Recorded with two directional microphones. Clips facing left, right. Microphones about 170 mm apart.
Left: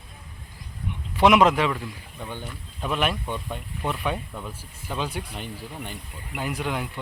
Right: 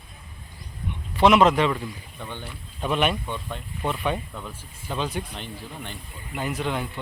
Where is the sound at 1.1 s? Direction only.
10° left (ahead or behind).